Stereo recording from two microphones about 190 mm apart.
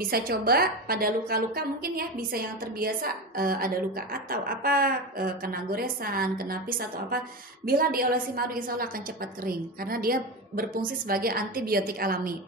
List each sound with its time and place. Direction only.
0.0 s a woman's voice: 50° right (ahead or behind)